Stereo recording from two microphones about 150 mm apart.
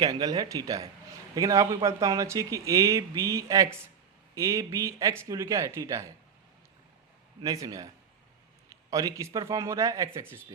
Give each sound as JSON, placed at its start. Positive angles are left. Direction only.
{"t": 0.0, "sound": "speech", "side_deg": -25}
{"t": 7.4, "sound": "speech", "side_deg": -20}